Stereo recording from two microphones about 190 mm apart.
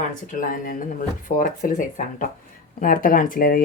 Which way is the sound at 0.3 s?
45° left (ahead or behind).